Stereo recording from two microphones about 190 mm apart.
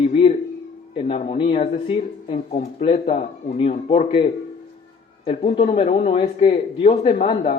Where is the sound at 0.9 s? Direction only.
30° left (ahead or behind).